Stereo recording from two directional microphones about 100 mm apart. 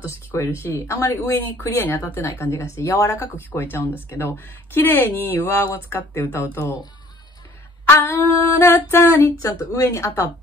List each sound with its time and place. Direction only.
0.0 s speech: 30° left (ahead or behind)
7.9 s speech: 20° left (ahead or behind)